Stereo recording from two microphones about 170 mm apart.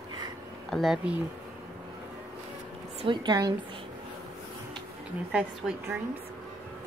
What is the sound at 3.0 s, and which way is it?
Speech, 25° right (ahead or behind).